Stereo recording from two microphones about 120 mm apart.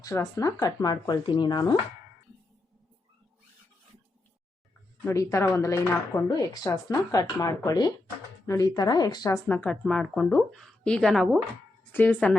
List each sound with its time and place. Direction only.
0.0 s speech: 30° left (ahead or behind)
5.0 s speech: 25° left (ahead or behind)
6.3 s speech: 35° left (ahead or behind)
9.5 s speech: 10° left (ahead or behind)
11.9 s speech: 15° left (ahead or behind)